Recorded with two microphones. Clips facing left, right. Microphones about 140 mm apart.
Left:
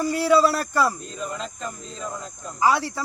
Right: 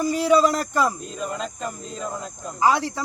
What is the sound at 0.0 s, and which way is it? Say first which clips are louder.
Speech: right 1 dB; 15° right (ahead or behind).